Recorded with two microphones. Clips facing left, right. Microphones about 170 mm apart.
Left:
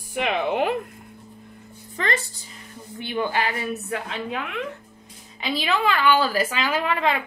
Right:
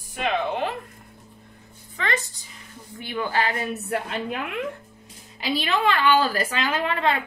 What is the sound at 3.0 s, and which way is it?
Speech, 20° left (ahead or behind).